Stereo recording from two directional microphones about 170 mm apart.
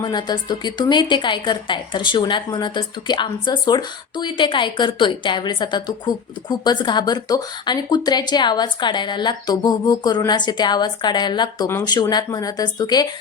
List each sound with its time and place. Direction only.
0.0 s a woman's voice: 25° left (ahead or behind)